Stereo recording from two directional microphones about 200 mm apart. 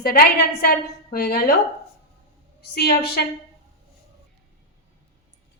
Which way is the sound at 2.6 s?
50° left (ahead or behind).